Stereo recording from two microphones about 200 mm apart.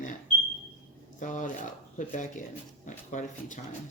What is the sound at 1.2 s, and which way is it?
Speech, 40° left (ahead or behind).